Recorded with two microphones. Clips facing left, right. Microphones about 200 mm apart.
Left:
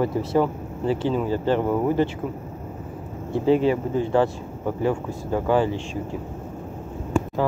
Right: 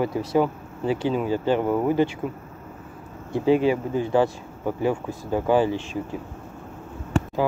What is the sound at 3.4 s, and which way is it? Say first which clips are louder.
Speech: even; 30° left (ahead or behind).